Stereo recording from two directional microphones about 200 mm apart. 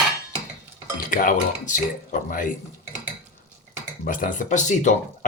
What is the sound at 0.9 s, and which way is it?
Speech, 45° left (ahead or behind).